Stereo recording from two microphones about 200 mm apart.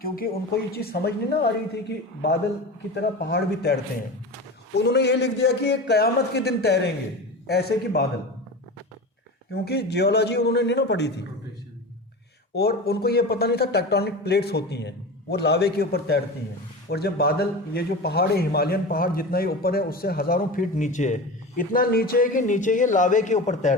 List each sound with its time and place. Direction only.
0.0 s a man's voice: 50° left (ahead or behind)
2.9 s a man's voice: 55° left (ahead or behind)
4.8 s a man's voice: 55° left (ahead or behind)
9.5 s a man's voice: 55° left (ahead or behind)
12.5 s a man's voice: 50° left (ahead or behind)